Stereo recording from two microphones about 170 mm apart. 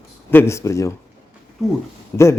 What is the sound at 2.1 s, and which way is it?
Speech, 15° left (ahead or behind).